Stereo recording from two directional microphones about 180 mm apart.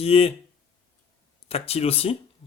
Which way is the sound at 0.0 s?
35° left (ahead or behind).